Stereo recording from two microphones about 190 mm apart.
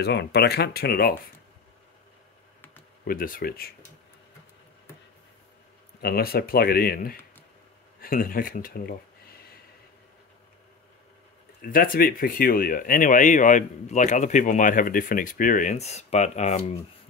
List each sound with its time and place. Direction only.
0.0 s speech: 60° left (ahead or behind)
3.1 s speech: 50° left (ahead or behind)
5.9 s speech: 55° left (ahead or behind)
11.6 s speech: 50° left (ahead or behind)